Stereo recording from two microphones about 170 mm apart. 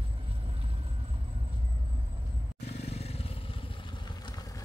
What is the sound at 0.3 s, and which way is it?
Vehicle, 35° right (ahead or behind).